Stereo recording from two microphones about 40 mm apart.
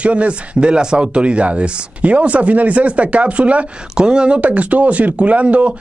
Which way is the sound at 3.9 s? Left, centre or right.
Right.